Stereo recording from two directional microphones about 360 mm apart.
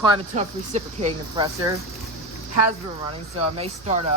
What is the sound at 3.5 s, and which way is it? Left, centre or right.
Speech, centre.